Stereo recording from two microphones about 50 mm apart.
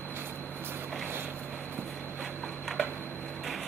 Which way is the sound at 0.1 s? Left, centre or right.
Right.